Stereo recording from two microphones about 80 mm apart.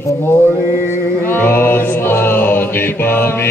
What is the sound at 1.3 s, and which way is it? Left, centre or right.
Music, left.